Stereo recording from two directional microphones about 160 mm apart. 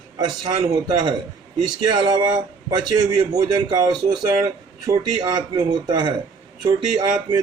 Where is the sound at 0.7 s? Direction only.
30° right (ahead or behind).